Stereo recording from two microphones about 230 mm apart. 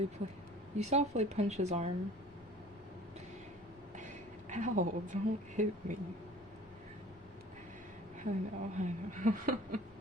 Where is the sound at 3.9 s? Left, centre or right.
Right.